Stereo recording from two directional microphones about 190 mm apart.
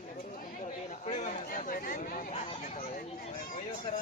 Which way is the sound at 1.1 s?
40° left (ahead or behind).